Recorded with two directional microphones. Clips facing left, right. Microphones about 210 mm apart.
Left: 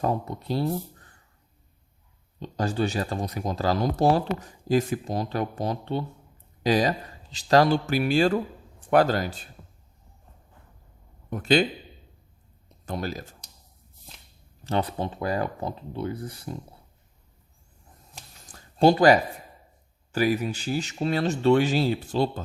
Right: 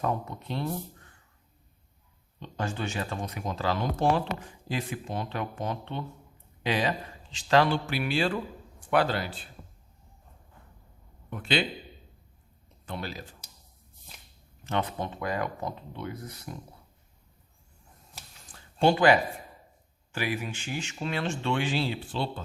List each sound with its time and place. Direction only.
0.0 s speech: 35° left (ahead or behind)
2.4 s a man's voice: 35° left (ahead or behind)
11.3 s a man's voice: 40° left (ahead or behind)
12.6 s speech: 40° left (ahead or behind)
14.6 s speech: 35° left (ahead or behind)
18.4 s a sound: 40° left (ahead or behind)
20.1 s speech: 40° left (ahead or behind)